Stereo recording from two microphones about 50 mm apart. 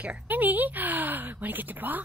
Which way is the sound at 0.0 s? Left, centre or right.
Right.